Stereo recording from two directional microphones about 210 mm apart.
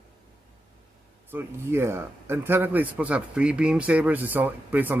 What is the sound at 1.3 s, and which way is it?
A man's voice, 10° right (ahead or behind).